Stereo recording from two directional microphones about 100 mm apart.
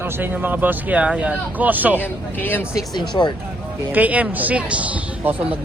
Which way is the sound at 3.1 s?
50° left (ahead or behind).